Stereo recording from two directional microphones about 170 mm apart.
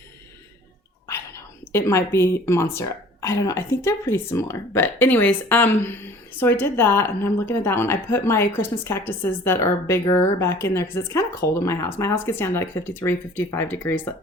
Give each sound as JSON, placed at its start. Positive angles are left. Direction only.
{"t": 1.7, "sound": "speech", "side_deg": 15}